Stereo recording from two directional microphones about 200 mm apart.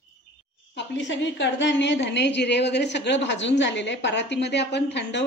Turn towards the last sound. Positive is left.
turn(degrees=60)  # may be behind; listen again after turning